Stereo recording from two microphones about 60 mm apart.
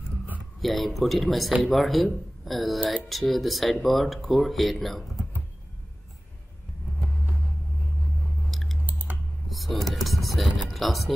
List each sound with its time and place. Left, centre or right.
0.6 s speech: centre
8.5 s chewing: centre
8.8 s clicking: right
9.5 s a sound: centre